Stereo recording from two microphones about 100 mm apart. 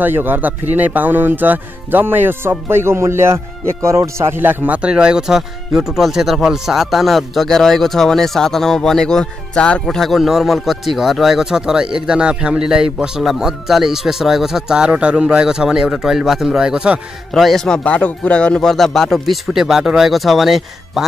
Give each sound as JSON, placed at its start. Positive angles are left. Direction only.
{"t": 0.0, "sound": "speech", "side_deg": -20}
{"t": 17.3, "sound": "speech", "side_deg": 5}